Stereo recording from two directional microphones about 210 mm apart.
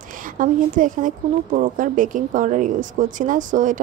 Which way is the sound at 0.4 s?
40° right (ahead or behind).